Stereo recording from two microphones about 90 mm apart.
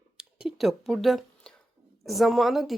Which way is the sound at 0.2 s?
5° right (ahead or behind).